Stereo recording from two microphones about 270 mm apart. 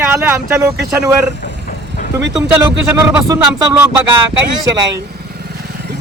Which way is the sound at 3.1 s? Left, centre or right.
Centre.